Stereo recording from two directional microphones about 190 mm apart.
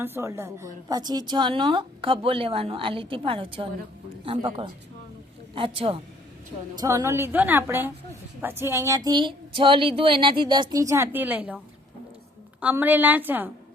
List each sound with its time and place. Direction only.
0.0 s a woman's voice: 15° right (ahead or behind)
6.7 s a woman's voice: 15° right (ahead or behind)